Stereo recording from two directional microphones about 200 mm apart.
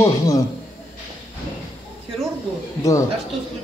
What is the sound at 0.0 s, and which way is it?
Speech, 15° left (ahead or behind).